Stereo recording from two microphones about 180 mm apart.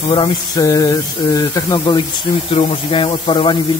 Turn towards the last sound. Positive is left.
turn(degrees=30)  # may be behind; listen again after turning